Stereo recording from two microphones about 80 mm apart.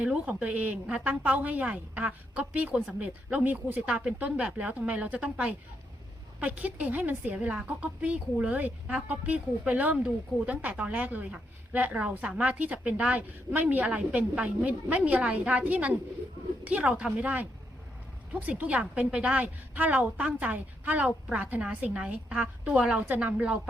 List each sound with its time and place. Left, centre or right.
0.0 s a woman's voice: centre